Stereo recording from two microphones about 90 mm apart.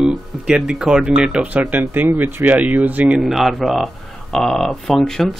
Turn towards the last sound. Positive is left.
turn(degrees=5)  # may be behind; listen again after turning